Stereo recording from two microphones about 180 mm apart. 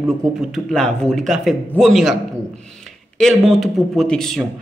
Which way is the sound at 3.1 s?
Centre (ahead or behind).